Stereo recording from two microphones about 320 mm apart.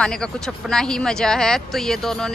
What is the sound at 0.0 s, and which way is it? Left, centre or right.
Speech, centre.